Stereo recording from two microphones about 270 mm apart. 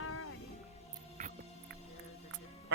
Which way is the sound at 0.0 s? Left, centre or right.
Left.